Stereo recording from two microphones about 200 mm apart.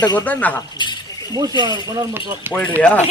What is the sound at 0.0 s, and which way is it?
Speech, 20° left (ahead or behind).